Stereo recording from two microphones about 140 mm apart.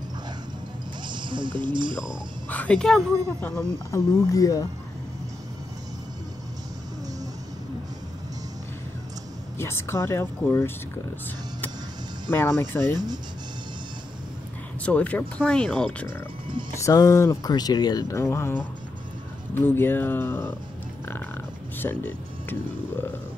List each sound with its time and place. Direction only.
1.0 s speech: 35° right (ahead or behind)
2.5 s speech: 10° left (ahead or behind)
3.3 s speech: 20° left (ahead or behind)
9.6 s speech: 20° left (ahead or behind)
12.3 s speech: 15° left (ahead or behind)
12.9 s speech: 30° right (ahead or behind)
14.8 s speech: 10° left (ahead or behind)
16.8 s speech: 20° left (ahead or behind)
21.7 s speech: 15° left (ahead or behind)